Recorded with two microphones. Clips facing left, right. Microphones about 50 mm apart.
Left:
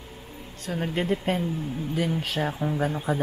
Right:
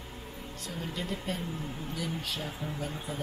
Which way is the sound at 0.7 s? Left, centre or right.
Left.